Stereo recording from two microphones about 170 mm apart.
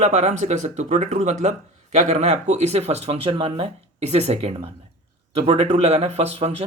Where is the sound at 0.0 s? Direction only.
40° right (ahead or behind).